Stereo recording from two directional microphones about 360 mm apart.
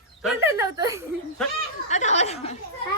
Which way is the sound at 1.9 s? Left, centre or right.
Centre.